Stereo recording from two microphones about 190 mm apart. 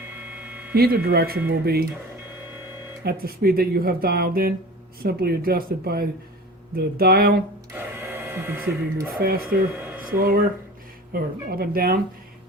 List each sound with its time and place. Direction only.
0.7 s speech: 55° right (ahead or behind)
3.0 s speech: 55° right (ahead or behind)
8.0 s speech: 10° right (ahead or behind)
9.1 s speech: 50° right (ahead or behind)